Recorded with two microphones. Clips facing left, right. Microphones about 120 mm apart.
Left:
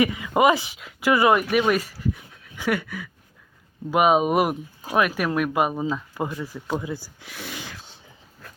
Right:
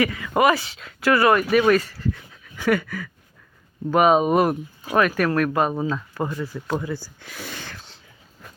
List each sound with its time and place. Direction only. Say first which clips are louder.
0.0 s speech: even; 20° left (ahead or behind)